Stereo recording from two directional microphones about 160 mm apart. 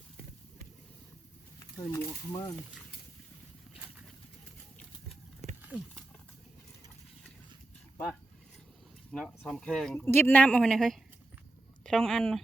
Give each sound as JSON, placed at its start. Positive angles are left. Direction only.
{"t": 1.5, "sound": "speech", "side_deg": 20}
{"t": 9.1, "sound": "speech", "side_deg": 5}